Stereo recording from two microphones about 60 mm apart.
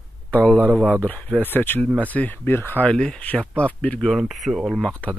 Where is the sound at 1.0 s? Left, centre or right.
Left.